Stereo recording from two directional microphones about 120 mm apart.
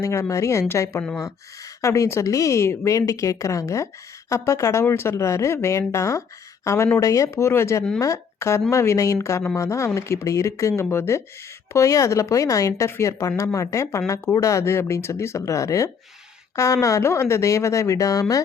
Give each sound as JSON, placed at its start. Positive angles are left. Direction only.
{"t": 0.0, "sound": "a woman's voice", "side_deg": 25}